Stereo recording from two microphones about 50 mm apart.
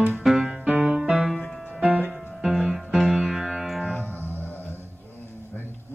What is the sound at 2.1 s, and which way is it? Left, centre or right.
Music, centre.